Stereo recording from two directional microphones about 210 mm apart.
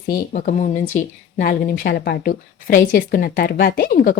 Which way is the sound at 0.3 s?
35° left (ahead or behind).